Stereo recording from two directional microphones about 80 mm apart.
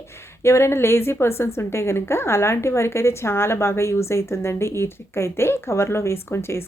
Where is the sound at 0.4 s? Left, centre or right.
Left.